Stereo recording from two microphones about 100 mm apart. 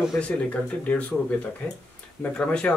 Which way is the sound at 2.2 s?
15° left (ahead or behind).